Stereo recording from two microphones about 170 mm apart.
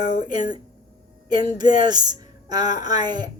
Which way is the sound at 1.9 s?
25° right (ahead or behind).